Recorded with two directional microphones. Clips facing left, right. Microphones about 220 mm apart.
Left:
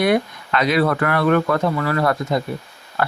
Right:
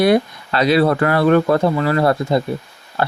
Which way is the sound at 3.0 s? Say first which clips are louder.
Right 2 dB; 30° right (ahead or behind).